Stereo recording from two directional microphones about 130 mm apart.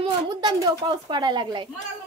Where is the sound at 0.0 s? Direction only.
30° right (ahead or behind).